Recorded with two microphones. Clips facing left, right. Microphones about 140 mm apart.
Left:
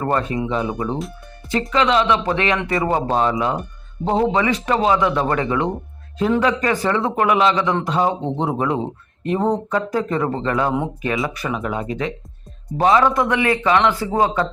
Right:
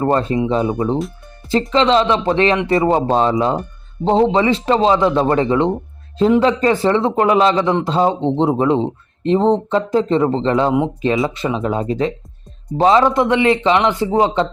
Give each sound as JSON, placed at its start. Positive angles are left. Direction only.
{"t": 0.0, "sound": "speech", "side_deg": -30}